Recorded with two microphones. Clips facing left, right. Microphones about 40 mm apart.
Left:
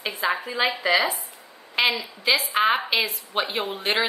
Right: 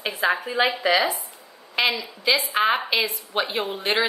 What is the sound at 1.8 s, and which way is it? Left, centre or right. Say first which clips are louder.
A woman's voice: even; centre.